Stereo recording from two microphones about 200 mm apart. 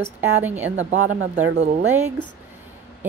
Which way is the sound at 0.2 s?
10° right (ahead or behind).